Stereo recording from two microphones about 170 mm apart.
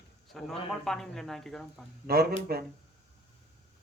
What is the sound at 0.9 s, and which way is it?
Speech, 5° left (ahead or behind).